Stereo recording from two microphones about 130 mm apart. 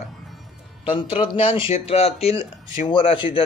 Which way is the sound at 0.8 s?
40° left (ahead or behind).